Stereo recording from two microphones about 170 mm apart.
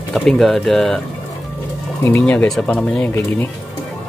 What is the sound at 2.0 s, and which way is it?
Speech, 10° left (ahead or behind).